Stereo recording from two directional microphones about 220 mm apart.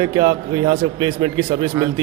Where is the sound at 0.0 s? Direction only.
20° right (ahead or behind).